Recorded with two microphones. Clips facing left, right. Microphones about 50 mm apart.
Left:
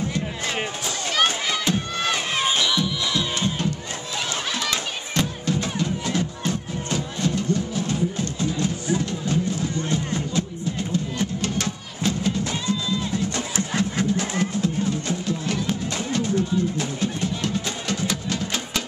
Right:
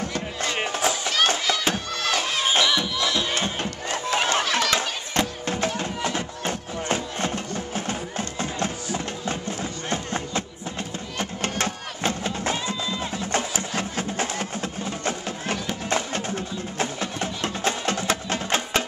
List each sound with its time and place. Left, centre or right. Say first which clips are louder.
2.0 s crowd: right 1 dB; left
2.6 s music: right 1 dB; centre
3.2 s music: left 1 dB; right